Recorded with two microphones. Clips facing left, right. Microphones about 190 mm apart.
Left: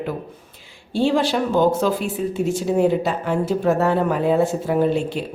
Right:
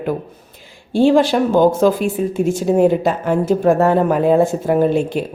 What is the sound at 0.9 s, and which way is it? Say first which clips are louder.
A woman's voice: right 6 dB; 50° right (ahead or behind).